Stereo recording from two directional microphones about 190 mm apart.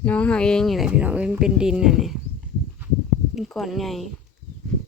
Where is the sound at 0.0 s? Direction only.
5° left (ahead or behind).